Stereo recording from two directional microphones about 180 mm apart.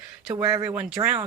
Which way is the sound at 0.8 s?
5° right (ahead or behind).